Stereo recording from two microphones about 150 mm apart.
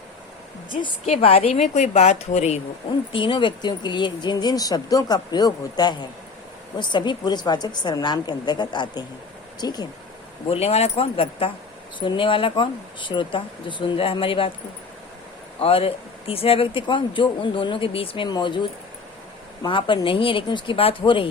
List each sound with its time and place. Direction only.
0.7 s speech: 30° left (ahead or behind)
1.0 s a woman's voice: 45° left (ahead or behind)
3.1 s speech: 35° left (ahead or behind)
10.5 s speech: 45° left (ahead or behind)
15.6 s speech: 40° left (ahead or behind)
19.6 s speech: 30° left (ahead or behind)